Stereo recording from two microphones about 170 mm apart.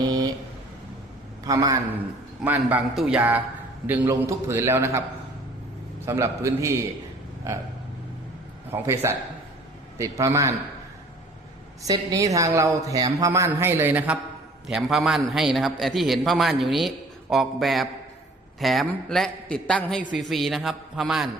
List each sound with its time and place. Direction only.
0.0 s vehicle: 25° right (ahead or behind)
1.5 s a man's voice: 20° right (ahead or behind)
2.4 s a man's voice: 10° right (ahead or behind)
6.1 s a man's voice: 15° right (ahead or behind)
8.7 s a man's voice: 15° right (ahead or behind)
11.8 s a man's voice: 20° right (ahead or behind); by 21.2 s 5° right (ahead or behind)